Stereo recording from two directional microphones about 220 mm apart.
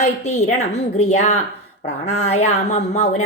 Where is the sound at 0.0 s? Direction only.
30° left (ahead or behind).